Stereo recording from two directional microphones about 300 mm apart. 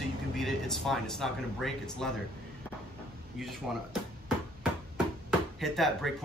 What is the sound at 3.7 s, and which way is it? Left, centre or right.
Speech, centre.